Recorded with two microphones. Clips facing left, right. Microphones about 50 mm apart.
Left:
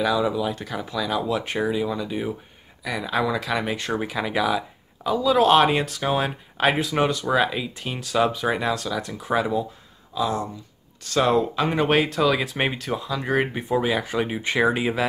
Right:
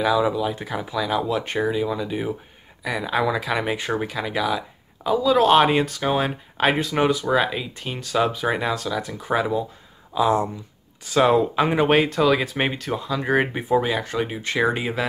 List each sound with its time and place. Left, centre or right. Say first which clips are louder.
0.0 s speech: right 2 dB; centre
4.0 s speech: left 1 dB; centre
10.1 s speech: right 5 dB; right
11.1 s speech: right 3 dB; centre